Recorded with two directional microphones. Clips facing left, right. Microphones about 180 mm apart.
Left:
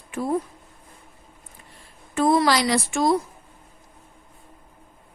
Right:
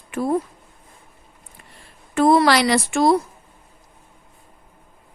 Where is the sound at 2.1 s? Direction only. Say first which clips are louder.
Right 4 dB; 70° right (ahead or behind).